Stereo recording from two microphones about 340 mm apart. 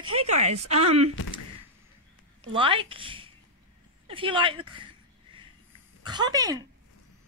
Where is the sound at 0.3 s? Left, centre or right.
Centre.